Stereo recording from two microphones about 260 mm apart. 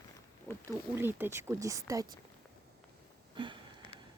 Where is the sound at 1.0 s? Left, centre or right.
Centre.